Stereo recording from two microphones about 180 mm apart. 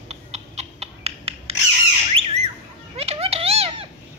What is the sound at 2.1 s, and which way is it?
Squawk, 35° right (ahead or behind).